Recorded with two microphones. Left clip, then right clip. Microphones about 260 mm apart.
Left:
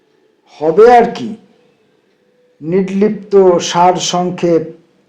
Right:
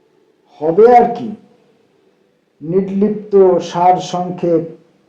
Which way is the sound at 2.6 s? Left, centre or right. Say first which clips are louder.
Left 2 dB; left.